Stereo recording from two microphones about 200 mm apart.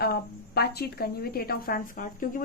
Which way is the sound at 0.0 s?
50° left (ahead or behind).